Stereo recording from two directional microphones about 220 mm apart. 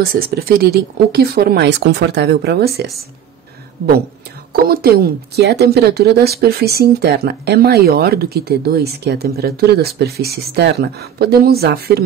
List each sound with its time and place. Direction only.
0.1 s speech: 45° right (ahead or behind)
4.5 s speech: 45° right (ahead or behind)